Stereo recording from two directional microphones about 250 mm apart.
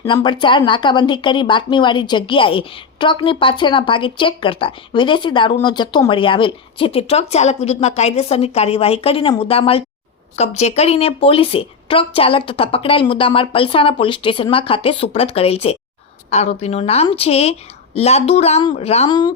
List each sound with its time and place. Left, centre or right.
0.0 s speech: centre